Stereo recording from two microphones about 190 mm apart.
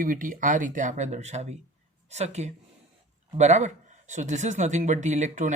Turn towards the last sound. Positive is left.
turn(degrees=-40)  # may be behind; listen again after turning